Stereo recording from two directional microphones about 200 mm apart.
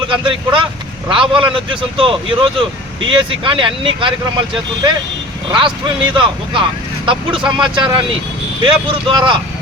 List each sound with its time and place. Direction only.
0.1 s speech: 25° right (ahead or behind)